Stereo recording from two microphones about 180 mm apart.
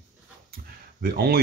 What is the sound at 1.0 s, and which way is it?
Speech, 60° right (ahead or behind).